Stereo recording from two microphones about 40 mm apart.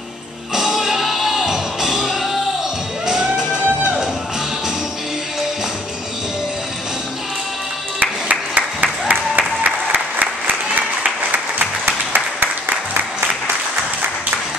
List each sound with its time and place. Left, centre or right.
0.6 s music: centre
3.1 s music: right
8.0 s applause: right
11.3 s applause: right